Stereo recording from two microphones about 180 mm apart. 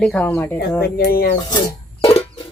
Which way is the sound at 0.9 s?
55° left (ahead or behind).